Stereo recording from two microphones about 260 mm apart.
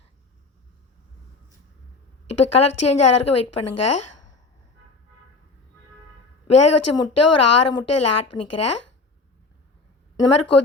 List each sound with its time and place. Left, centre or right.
2.2 s speech: left
6.5 s speech: left
10.2 s speech: left